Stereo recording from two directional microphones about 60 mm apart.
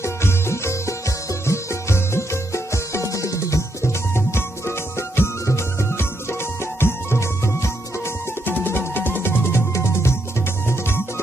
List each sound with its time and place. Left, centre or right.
0.0 s music: left
8.5 s music: left